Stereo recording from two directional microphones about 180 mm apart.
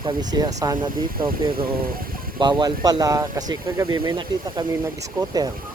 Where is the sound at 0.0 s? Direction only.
25° right (ahead or behind).